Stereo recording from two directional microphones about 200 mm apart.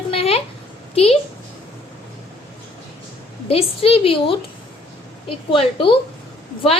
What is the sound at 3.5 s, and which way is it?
Child singing, 30° left (ahead or behind).